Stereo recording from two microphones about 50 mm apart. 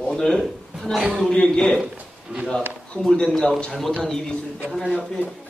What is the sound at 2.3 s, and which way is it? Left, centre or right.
Speech, centre.